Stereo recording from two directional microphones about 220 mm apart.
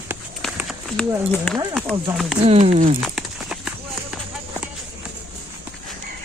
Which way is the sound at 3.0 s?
Centre (ahead or behind).